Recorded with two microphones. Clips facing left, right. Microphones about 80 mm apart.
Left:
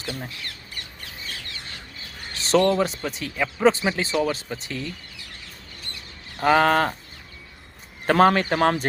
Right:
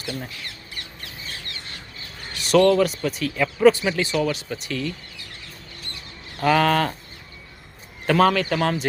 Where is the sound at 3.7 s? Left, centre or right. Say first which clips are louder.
Right 3 dB; left.